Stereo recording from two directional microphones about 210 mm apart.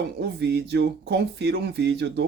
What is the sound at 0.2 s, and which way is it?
Speech, 50° right (ahead or behind).